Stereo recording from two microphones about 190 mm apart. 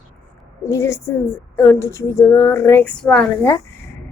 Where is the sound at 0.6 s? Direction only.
15° left (ahead or behind).